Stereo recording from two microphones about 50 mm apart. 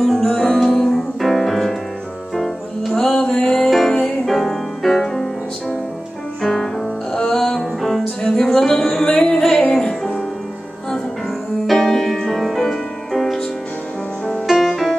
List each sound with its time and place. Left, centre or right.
0.0 s music: centre
11.6 s music: centre
14.5 s music: centre